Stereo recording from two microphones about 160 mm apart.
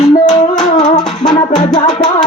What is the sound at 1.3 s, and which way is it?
Music, 30° left (ahead or behind).